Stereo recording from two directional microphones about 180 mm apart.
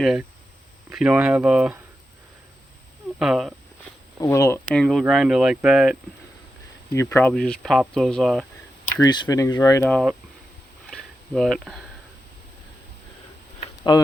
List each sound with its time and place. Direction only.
0.0 s speech: centre (ahead or behind)
3.2 s speech: centre (ahead or behind)
4.2 s speech: 15° left (ahead or behind)
4.7 s speech: centre (ahead or behind)
6.9 s speech: 15° left (ahead or behind)
9.0 s speech: 25° left (ahead or behind)
9.9 s speech: centre (ahead or behind)
10.8 s a sound: centre (ahead or behind)
13.9 s speech: 25° left (ahead or behind)